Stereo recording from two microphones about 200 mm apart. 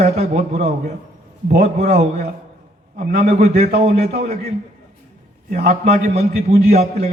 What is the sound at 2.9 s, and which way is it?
Speech, 35° right (ahead or behind).